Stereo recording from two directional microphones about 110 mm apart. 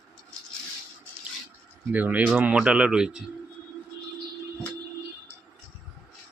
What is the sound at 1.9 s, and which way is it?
Speech, 15° right (ahead or behind).